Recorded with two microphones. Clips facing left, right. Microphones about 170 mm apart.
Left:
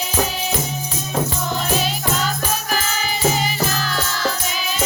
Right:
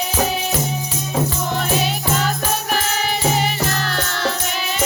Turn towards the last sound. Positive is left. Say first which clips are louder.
# right 1 dB
turn(degrees=-65)  # may be behind; listen again after turning